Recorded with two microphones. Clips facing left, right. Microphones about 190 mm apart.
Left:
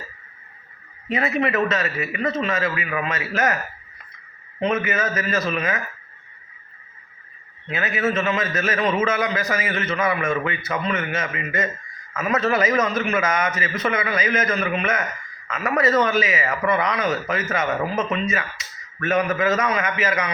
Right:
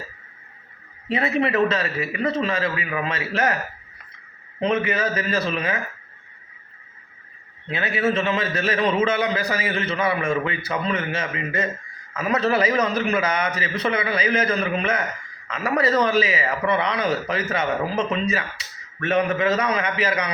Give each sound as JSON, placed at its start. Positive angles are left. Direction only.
{"t": 1.0, "sound": "a man's voice", "side_deg": -30}
{"t": 4.7, "sound": "a man's voice", "side_deg": -30}
{"t": 7.7, "sound": "a man's voice", "side_deg": -30}